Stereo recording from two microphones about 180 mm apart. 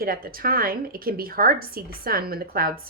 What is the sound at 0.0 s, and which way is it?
A woman's voice, 55° right (ahead or behind).